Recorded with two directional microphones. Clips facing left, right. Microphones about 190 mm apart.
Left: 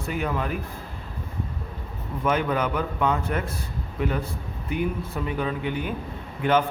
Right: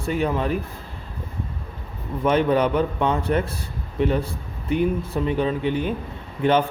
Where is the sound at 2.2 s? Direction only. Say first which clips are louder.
Right 5 dB; 30° right (ahead or behind).